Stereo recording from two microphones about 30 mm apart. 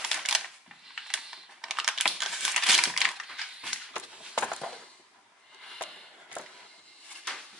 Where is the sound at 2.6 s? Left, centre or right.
Centre.